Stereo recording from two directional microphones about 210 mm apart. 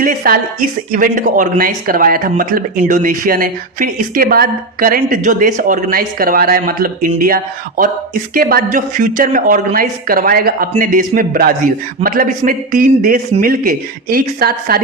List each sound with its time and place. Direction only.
0.0 s speech: 40° right (ahead or behind)